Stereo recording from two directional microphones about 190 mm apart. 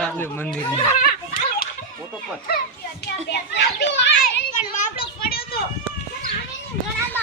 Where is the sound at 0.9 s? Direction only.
45° left (ahead or behind).